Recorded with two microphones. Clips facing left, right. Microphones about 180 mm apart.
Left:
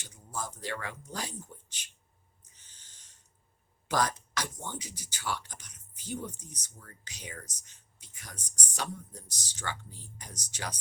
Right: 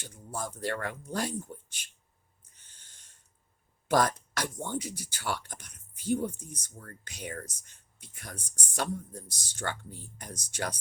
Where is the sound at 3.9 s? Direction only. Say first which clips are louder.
Right 4 dB; 55° right (ahead or behind).